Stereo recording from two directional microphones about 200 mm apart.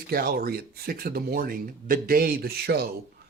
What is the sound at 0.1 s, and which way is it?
Speech, 50° right (ahead or behind).